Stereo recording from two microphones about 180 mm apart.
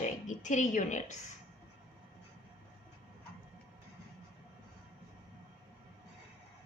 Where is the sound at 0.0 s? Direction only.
45° left (ahead or behind).